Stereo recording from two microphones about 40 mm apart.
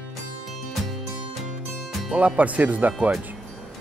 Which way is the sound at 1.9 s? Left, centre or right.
Centre.